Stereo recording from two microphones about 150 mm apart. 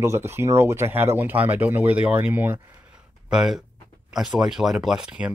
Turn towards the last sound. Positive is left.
turn(degrees=-5)  # may be behind; listen again after turning